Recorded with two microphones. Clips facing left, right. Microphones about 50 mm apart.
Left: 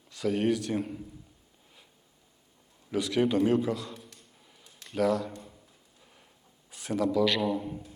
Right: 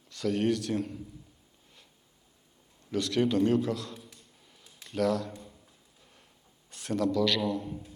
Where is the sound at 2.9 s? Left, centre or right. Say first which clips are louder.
Left 1 dB; centre.